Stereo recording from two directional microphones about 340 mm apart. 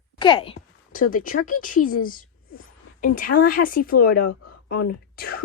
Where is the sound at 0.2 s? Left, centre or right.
Centre.